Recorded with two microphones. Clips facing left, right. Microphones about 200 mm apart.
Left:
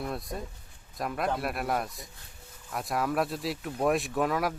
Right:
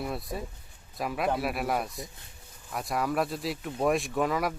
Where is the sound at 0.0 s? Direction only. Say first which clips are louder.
Right 1 dB; 5° right (ahead or behind).